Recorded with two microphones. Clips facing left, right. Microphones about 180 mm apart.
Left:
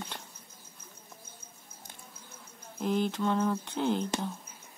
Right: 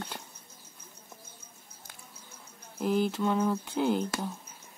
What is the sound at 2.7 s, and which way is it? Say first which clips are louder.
Speech: right 2 dB; 5° right (ahead or behind).